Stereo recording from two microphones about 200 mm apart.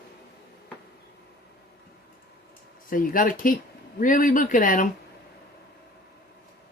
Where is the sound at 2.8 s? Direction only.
45° left (ahead or behind).